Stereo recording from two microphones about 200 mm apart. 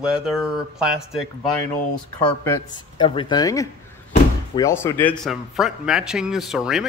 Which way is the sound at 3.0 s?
25° left (ahead or behind).